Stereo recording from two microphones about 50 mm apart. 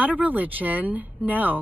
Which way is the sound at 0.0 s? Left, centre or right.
Right.